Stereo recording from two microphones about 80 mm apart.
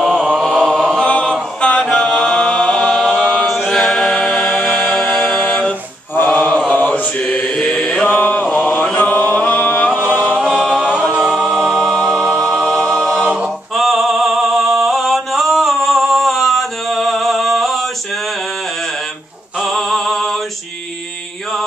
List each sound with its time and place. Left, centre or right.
0.0 s a sound: centre
0.4 s chant: centre
0.7 s a capella: centre
3.4 s chant: centre
4.6 s music: centre
6.1 s mantra: left
8.5 s chant: centre
9.8 s music: centre
10.4 s a capella: centre
13.7 s singing: centre
19.6 s music: centre